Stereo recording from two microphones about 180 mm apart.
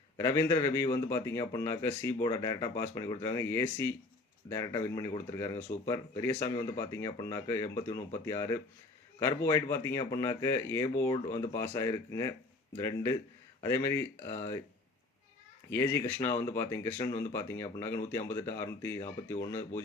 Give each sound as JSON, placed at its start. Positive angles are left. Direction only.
{"t": 0.2, "sound": "a man's voice", "side_deg": 15}
{"t": 15.7, "sound": "a man's voice", "side_deg": 15}